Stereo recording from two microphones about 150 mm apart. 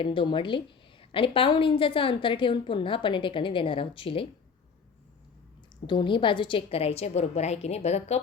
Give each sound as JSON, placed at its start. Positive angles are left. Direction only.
{"t": 0.0, "sound": "a woman's voice", "side_deg": 35}
{"t": 5.8, "sound": "a woman's voice", "side_deg": 30}